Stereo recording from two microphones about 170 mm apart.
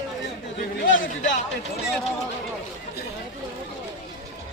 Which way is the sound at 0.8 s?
90° left.